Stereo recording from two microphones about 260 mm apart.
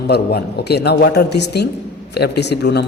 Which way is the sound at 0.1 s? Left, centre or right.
Left.